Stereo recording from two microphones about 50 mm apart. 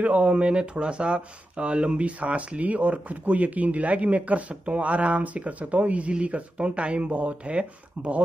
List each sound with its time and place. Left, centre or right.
0.0 s speech: right